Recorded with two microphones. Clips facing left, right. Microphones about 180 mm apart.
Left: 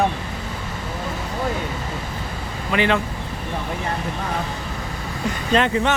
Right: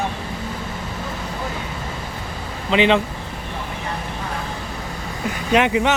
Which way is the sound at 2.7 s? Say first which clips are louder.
Right 4 dB; 20° right (ahead or behind).